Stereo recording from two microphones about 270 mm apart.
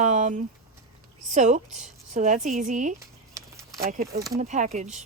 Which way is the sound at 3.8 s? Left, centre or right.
Right.